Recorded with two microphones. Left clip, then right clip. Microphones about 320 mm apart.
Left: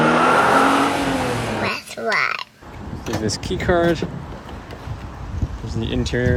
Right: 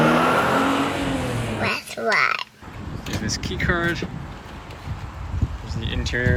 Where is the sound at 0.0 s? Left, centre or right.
Centre.